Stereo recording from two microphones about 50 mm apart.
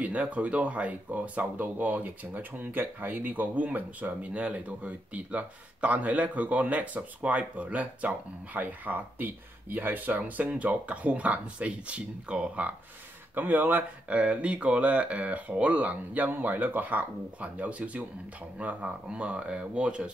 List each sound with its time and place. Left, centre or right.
0.0 s speech: right
13.3 s speech: right